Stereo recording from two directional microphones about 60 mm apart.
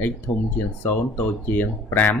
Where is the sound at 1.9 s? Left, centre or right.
Left.